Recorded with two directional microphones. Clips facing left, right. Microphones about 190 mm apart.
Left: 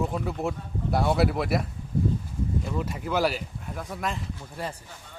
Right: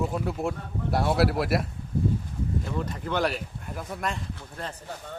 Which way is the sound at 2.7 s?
5° left (ahead or behind).